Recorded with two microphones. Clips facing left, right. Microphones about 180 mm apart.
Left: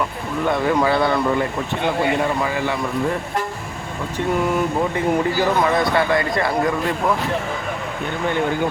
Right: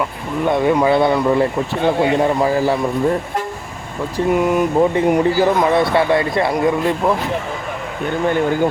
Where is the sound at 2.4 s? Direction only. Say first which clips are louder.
Right 6 dB; 35° right (ahead or behind).